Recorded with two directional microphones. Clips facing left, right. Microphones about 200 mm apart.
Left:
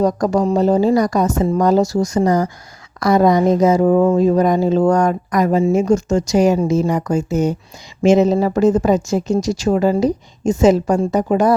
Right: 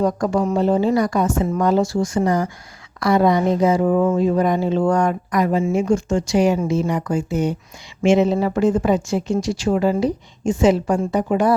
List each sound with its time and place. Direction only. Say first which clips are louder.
0.0 s speech: left 3 dB; 40° left (ahead or behind)